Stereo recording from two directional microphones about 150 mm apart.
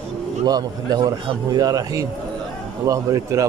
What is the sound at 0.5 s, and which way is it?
Speech, 25° right (ahead or behind).